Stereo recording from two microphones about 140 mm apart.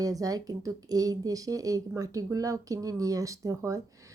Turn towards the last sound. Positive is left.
turn(degrees=-20)  # may be behind; listen again after turning